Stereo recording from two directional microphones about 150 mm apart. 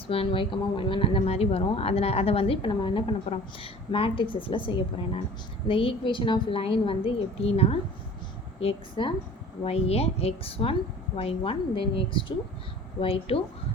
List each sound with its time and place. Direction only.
0.1 s a woman's voice: 35° left (ahead or behind)